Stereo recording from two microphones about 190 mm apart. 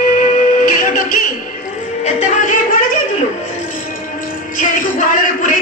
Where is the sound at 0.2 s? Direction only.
45° left (ahead or behind).